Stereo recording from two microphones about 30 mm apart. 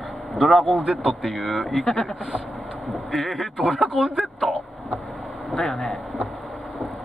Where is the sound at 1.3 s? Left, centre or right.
Centre.